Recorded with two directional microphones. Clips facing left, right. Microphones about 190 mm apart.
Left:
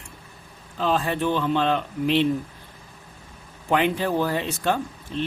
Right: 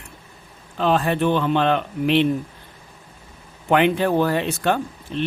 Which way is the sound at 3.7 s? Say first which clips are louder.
Right 4 dB; 65° right (ahead or behind).